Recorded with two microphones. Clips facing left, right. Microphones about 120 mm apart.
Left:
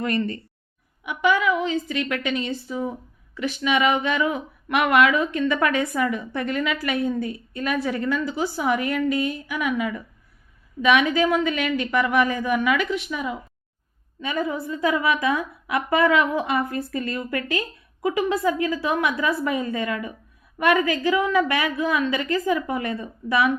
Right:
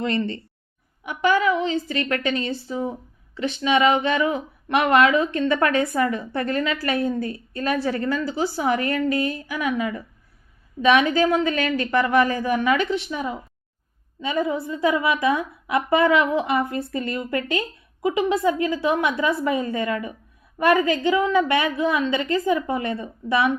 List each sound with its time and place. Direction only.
0.0 s a woman's voice: 25° right (ahead or behind)